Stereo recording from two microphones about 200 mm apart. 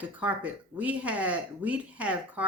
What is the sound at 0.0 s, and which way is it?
Speech, 5° right (ahead or behind).